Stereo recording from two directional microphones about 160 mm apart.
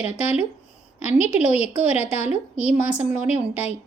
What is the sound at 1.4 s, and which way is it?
Speech, 45° left (ahead or behind).